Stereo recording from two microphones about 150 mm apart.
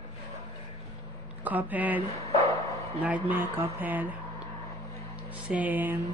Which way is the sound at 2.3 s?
20° left (ahead or behind).